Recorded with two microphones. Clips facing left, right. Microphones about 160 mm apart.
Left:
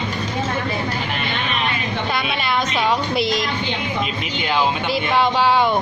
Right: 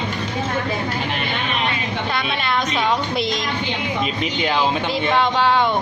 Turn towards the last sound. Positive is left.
turn(degrees=10)  # may be behind; listen again after turning